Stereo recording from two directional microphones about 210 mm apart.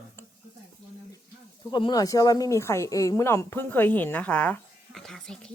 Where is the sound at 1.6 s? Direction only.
20° left (ahead or behind).